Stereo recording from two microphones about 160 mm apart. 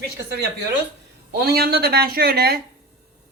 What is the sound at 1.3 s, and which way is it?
A woman's voice, 80° right.